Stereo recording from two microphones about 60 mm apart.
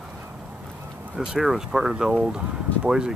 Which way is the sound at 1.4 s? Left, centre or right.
Centre.